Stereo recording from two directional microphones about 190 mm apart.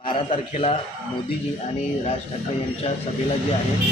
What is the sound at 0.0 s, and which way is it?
Speech, 25° left (ahead or behind).